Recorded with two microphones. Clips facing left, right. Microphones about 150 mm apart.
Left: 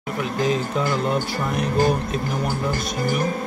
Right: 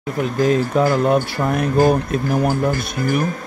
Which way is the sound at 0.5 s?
50° right (ahead or behind).